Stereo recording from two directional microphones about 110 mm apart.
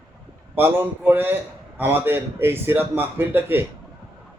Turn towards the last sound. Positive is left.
turn(degrees=-20)  # may be behind; listen again after turning